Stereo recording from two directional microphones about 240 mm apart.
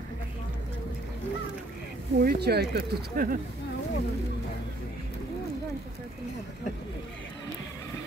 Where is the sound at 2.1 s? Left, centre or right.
Right.